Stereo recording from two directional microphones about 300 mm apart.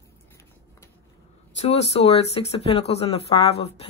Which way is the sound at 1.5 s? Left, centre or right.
Left.